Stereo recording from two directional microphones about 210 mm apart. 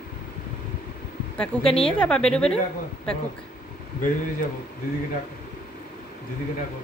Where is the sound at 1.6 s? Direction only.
25° left (ahead or behind).